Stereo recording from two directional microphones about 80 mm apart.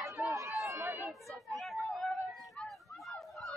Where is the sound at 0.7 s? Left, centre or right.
Right.